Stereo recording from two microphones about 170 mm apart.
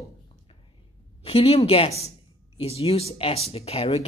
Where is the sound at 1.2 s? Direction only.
35° left (ahead or behind).